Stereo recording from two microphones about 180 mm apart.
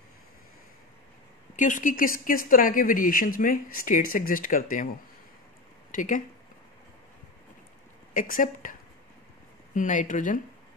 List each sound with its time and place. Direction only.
1.6 s speech: 45° left (ahead or behind)
5.9 s speech: 45° left (ahead or behind)
8.1 s speech: 50° left (ahead or behind)
9.8 s speech: 45° left (ahead or behind)